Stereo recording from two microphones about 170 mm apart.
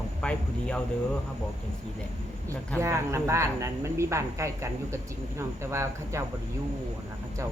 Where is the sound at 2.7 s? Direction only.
15° right (ahead or behind).